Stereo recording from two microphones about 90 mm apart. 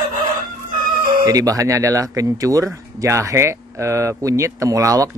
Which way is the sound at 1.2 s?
40° right (ahead or behind).